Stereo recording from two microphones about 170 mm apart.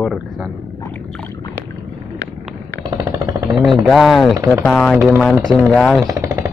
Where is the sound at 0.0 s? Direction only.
Centre (ahead or behind).